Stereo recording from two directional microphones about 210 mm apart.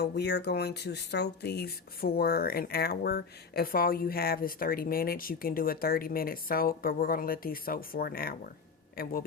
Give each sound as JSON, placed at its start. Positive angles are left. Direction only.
{"t": 0.0, "sound": "speech", "side_deg": 55}